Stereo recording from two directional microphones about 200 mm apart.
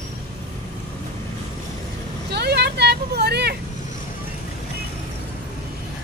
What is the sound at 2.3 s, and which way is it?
Vehicle, 55° right (ahead or behind).